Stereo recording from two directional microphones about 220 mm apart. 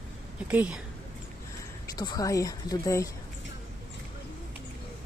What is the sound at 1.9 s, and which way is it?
A woman's voice, 15° left (ahead or behind).